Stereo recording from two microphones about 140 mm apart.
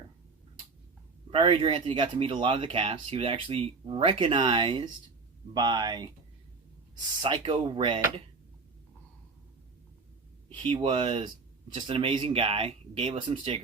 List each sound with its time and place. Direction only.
1.3 s speech: 40° right (ahead or behind)
10.5 s speech: 40° right (ahead or behind)